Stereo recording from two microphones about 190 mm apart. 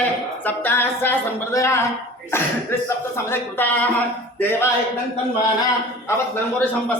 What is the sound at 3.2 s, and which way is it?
A woman's voice, 10° left (ahead or behind).